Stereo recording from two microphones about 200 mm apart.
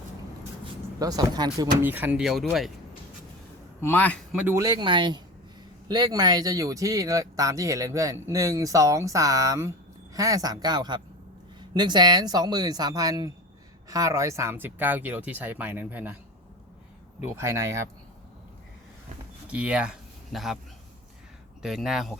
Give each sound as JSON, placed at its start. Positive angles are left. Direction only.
{"t": 0.9, "sound": "speech", "side_deg": -20}
{"t": 1.8, "sound": "speech", "side_deg": -10}
{"t": 3.8, "sound": "a man's voice", "side_deg": 10}
{"t": 4.3, "sound": "speech", "side_deg": -5}
{"t": 17.2, "sound": "speech", "side_deg": -15}
{"t": 19.5, "sound": "speech", "side_deg": -5}
{"t": 21.6, "sound": "speech", "side_deg": 0}